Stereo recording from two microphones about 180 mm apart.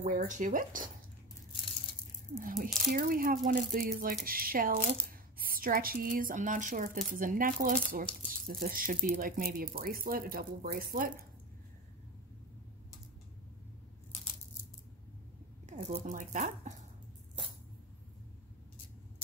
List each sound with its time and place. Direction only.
0.0 s speech: 40° right (ahead or behind)
2.3 s speech: 50° right (ahead or behind)
15.8 s speech: 40° right (ahead or behind)